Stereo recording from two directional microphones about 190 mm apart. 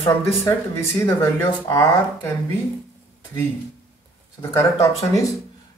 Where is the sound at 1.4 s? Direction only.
25° left (ahead or behind).